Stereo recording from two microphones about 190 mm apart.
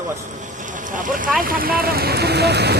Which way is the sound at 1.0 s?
45° right (ahead or behind).